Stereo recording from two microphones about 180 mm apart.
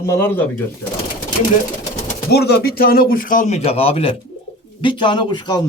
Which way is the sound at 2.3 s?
65° left (ahead or behind).